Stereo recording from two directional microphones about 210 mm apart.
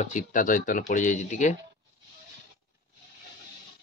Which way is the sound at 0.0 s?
35° left (ahead or behind).